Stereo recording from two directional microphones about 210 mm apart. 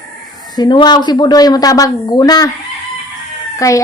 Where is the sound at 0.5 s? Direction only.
20° left (ahead or behind).